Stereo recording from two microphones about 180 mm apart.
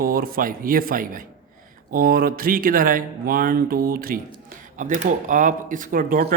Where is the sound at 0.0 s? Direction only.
55° right (ahead or behind).